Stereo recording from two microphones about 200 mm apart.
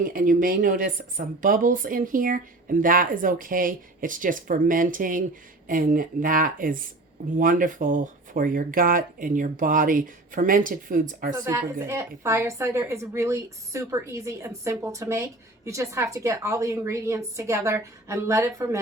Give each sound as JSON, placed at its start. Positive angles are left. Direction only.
{"t": 0.0, "sound": "speech", "side_deg": -45}
{"t": 11.4, "sound": "a woman's voice", "side_deg": -15}